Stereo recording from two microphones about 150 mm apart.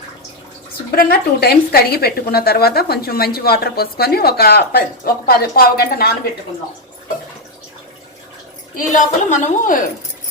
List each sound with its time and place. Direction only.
0.9 s a woman's voice: 85° left
8.7 s a woman's voice: 60° left (ahead or behind)